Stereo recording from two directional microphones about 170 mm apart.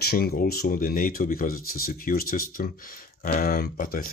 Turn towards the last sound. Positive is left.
turn(degrees=55)  # may be behind; listen again after turning